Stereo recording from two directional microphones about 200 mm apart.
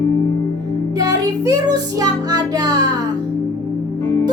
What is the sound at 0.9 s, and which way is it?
Music, 15° right (ahead or behind).